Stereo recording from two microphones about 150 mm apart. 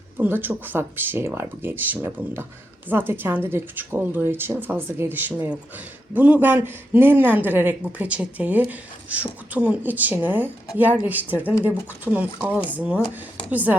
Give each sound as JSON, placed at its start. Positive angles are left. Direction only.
{"t": 0.2, "sound": "speech", "side_deg": -15}